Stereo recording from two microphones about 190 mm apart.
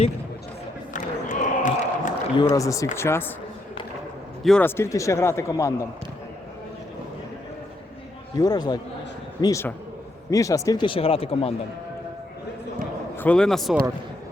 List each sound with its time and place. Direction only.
0.9 s a sound: 45° left (ahead or behind)
2.3 s a man's voice: 20° left (ahead or behind)
4.4 s a man's voice: 5° left (ahead or behind)
8.4 s a man's voice: 20° left (ahead or behind)
13.1 s speech: 5° left (ahead or behind)